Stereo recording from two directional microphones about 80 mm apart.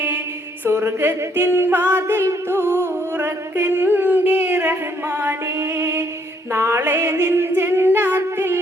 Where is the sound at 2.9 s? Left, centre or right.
Right.